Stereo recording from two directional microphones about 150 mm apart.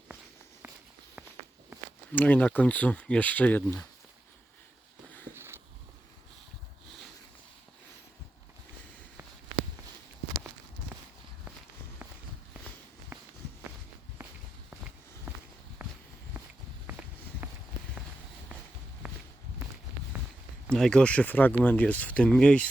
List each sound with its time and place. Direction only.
2.1 s speech: 10° left (ahead or behind)
5.3 s walk: 15° right (ahead or behind)
13.1 s walk: 15° right (ahead or behind)
15.8 s a sound: 5° right (ahead or behind)
16.8 s walk: 10° right (ahead or behind)
19.0 s walk: 5° right (ahead or behind)
20.7 s speech: 5° left (ahead or behind)